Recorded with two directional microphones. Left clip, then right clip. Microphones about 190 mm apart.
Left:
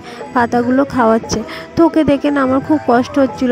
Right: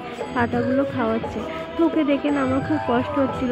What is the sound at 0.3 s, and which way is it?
A woman's voice, 55° left (ahead or behind).